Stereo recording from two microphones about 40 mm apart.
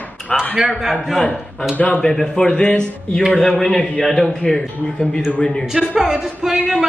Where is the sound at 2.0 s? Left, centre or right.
Centre.